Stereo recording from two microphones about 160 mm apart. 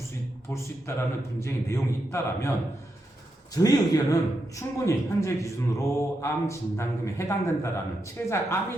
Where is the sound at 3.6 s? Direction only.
20° left (ahead or behind).